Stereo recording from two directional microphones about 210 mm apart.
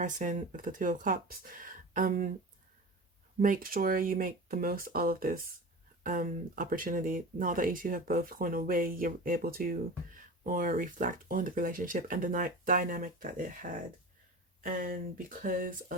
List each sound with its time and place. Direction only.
0.0 s speech: 35° right (ahead or behind)
3.4 s speech: 40° right (ahead or behind)